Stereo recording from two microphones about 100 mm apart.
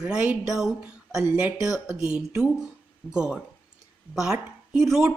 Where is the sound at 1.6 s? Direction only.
5° right (ahead or behind).